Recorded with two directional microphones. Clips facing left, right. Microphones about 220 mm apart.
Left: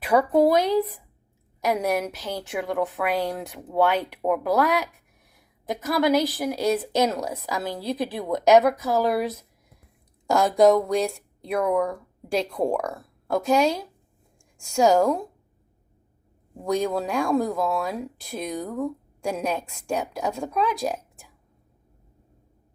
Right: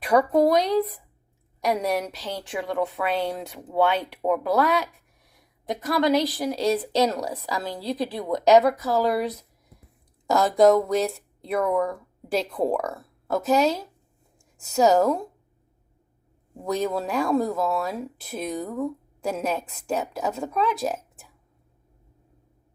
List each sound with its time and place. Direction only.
0.0 s a woman's voice: 5° left (ahead or behind)
2.6 s speech: centre (ahead or behind)
3.0 s a woman's voice: 15° left (ahead or behind)
3.2 s speech: centre (ahead or behind)
7.1 s speech: centre (ahead or behind)
7.3 s a woman's voice: 15° left (ahead or behind); by 15.3 s centre (ahead or behind)
16.6 s speech: 5° right (ahead or behind)